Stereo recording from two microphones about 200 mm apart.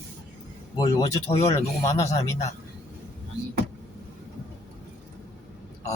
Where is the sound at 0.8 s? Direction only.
15° left (ahead or behind).